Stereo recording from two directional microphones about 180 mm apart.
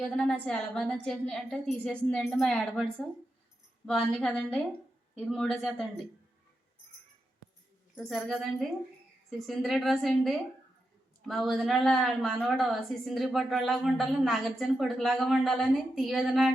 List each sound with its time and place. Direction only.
0.1 s a woman's voice: 5° left (ahead or behind)
3.8 s a woman's voice: 5° left (ahead or behind)
7.9 s a woman's voice: centre (ahead or behind)